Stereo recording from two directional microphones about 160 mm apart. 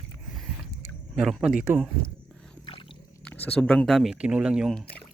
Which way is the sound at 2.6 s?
30° left (ahead or behind).